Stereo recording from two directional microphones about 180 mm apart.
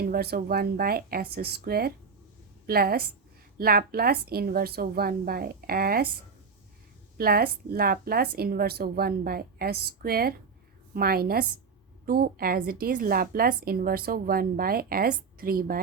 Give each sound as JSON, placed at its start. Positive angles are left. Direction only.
{"t": 0.0, "sound": "a woman's voice", "side_deg": -60}
{"t": 7.2, "sound": "a woman's voice", "side_deg": -55}